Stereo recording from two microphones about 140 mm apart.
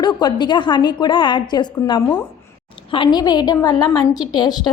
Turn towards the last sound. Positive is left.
turn(degrees=30)  # may be behind; listen again after turning